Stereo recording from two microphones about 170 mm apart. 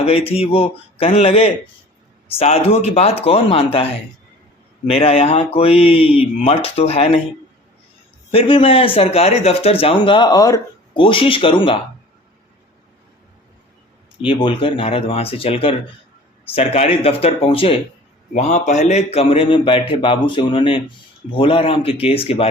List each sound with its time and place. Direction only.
0.0 s speech: 35° left (ahead or behind)
8.3 s speech: 30° left (ahead or behind)
14.3 s speech: 30° left (ahead or behind)
18.3 s speech: 45° left (ahead or behind)